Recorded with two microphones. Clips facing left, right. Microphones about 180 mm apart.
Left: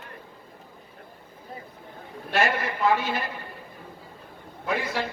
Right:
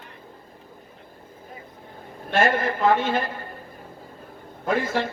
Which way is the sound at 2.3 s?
50° right (ahead or behind).